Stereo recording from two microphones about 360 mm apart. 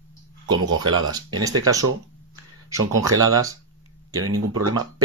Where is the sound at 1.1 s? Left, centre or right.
Centre.